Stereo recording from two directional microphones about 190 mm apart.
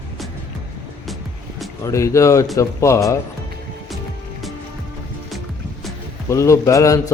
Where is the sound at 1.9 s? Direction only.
15° left (ahead or behind).